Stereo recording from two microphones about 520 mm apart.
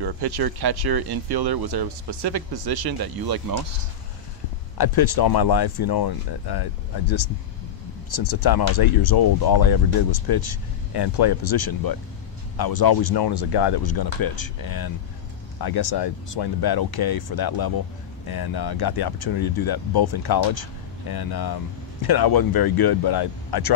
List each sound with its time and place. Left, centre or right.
0.0 s speech: right
4.7 s speech: left